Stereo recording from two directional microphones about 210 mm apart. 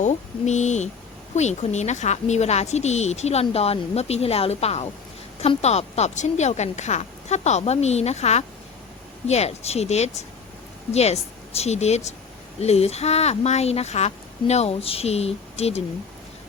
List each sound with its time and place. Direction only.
0.0 s a woman's voice: 35° left (ahead or behind)